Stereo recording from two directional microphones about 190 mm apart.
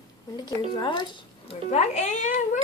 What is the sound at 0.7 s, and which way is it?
Speech, 25° left (ahead or behind).